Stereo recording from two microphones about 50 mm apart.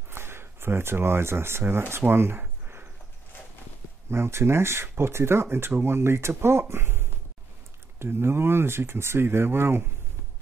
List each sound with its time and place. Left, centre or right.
0.1 s speech: right
4.1 s speech: right